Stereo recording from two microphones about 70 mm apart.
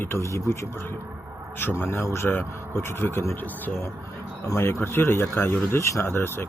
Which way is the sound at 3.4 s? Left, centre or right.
Left.